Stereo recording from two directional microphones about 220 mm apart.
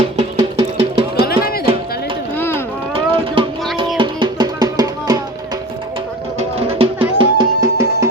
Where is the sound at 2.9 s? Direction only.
25° right (ahead or behind).